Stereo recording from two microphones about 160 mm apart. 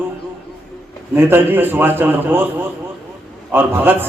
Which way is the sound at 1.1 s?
15° right (ahead or behind).